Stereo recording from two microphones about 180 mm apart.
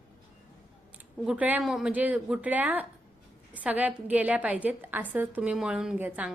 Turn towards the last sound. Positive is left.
turn(degrees=-10)  # may be behind; listen again after turning